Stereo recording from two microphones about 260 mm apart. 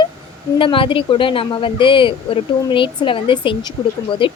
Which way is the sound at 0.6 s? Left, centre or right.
Centre.